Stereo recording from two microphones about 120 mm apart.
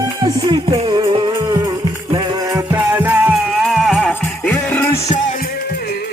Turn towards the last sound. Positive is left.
turn(degrees=60)  # may be behind; listen again after turning